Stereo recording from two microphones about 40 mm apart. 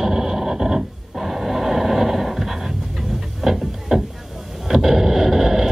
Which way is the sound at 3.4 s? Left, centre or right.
Centre.